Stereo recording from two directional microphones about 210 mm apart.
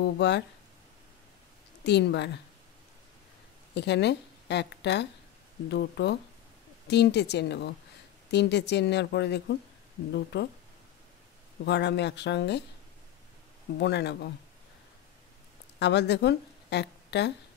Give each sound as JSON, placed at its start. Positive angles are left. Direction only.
{"t": 0.0, "sound": "a woman's voice", "side_deg": 55}
{"t": 1.9, "sound": "a woman's voice", "side_deg": 55}
{"t": 3.7, "sound": "a woman's voice", "side_deg": 55}
{"t": 11.6, "sound": "a woman's voice", "side_deg": 55}
{"t": 13.7, "sound": "a woman's voice", "side_deg": 55}
{"t": 15.8, "sound": "speech", "side_deg": 55}